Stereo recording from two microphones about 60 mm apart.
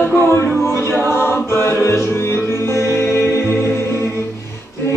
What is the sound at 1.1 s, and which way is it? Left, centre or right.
Music, left.